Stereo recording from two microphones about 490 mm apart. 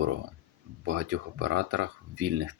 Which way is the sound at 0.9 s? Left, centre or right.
Right.